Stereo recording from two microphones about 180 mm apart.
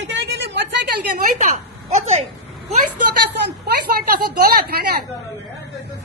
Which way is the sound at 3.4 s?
60° right (ahead or behind).